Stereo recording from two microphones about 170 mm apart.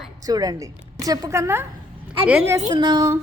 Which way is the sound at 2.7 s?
25° right (ahead or behind).